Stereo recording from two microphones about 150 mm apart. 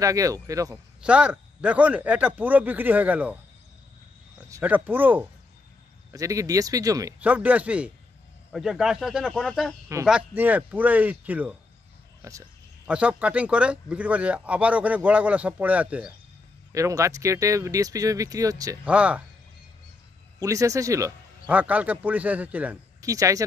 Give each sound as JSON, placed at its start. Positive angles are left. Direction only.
{"t": 0.0, "sound": "speech", "side_deg": -20}
{"t": 1.0, "sound": "speech", "side_deg": -10}
{"t": 4.5, "sound": "speech", "side_deg": -15}
{"t": 7.2, "sound": "speech", "side_deg": -10}
{"t": 12.2, "sound": "speech", "side_deg": -20}
{"t": 12.8, "sound": "speech", "side_deg": -5}
{"t": 16.7, "sound": "speech", "side_deg": -20}
{"t": 18.9, "sound": "speech", "side_deg": -10}
{"t": 20.3, "sound": "speech", "side_deg": -20}
{"t": 21.5, "sound": "speech", "side_deg": -10}
{"t": 22.9, "sound": "speech", "side_deg": -20}